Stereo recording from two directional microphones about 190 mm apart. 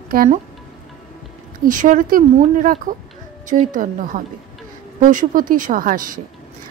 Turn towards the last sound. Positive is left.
turn(degrees=-45)  # may be behind; listen again after turning